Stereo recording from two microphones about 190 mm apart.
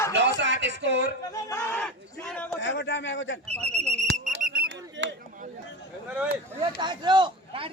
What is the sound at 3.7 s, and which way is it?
Whistle, 35° right (ahead or behind).